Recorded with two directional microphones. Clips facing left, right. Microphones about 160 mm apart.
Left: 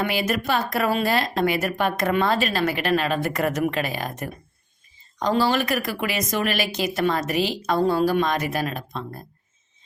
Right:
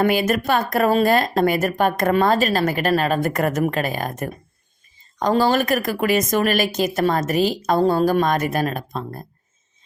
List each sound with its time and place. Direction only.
0.0 s a woman's voice: 50° right (ahead or behind)